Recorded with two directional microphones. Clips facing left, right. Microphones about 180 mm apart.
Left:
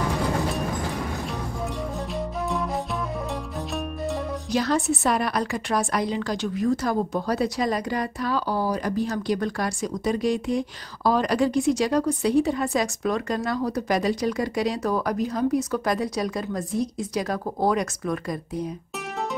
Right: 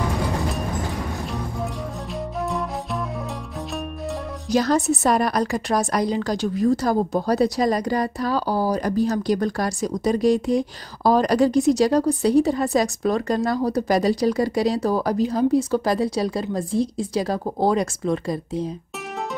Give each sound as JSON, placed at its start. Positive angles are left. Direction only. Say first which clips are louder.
{"t": 2.1, "sound": "music", "louder": "right 3 dB", "side_deg": 0}
{"t": 4.5, "sound": "a woman's voice", "louder": "right 5 dB", "side_deg": -40}